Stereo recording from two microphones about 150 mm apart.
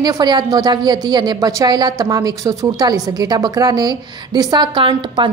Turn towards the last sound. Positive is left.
turn(degrees=-35)  # may be behind; listen again after turning